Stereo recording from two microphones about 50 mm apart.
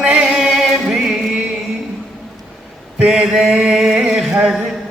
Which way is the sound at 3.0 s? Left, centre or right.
Centre.